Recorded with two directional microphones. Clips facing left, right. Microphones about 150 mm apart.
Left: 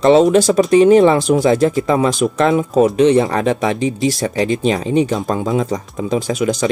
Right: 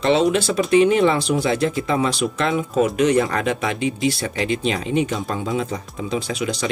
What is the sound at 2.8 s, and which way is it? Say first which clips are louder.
Speech: left 5 dB; 30° left (ahead or behind).